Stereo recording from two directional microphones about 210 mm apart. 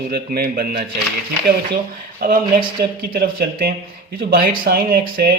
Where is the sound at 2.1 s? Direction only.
40° right (ahead or behind).